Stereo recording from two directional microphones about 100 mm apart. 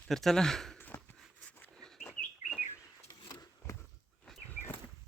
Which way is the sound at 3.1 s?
35° left (ahead or behind).